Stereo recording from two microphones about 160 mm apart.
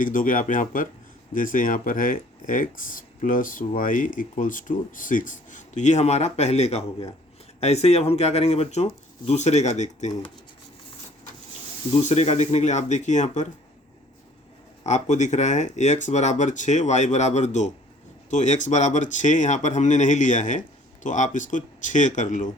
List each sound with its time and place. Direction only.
0.0 s speech: 55° left (ahead or behind)
12.0 s speech: 40° left (ahead or behind)
14.8 s speech: 45° left (ahead or behind)